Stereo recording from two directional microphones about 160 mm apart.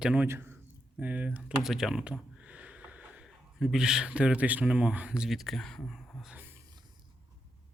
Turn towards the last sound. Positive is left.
turn(degrees=-10)  # may be behind; listen again after turning